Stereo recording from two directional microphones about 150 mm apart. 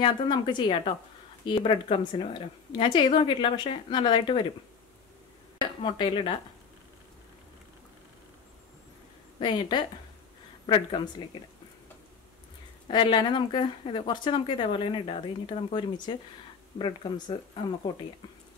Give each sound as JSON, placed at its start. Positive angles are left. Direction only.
{"t": 0.0, "sound": "a woman's voice", "side_deg": 30}
{"t": 5.6, "sound": "speech", "side_deg": 30}
{"t": 9.4, "sound": "a woman's voice", "side_deg": 35}
{"t": 12.8, "sound": "a woman's voice", "side_deg": 35}
{"t": 16.7, "sound": "a woman's voice", "side_deg": 35}